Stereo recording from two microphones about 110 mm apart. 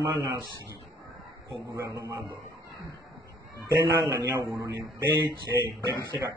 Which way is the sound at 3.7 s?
30° right (ahead or behind).